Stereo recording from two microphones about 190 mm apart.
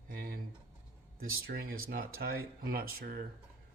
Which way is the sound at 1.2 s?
90° right.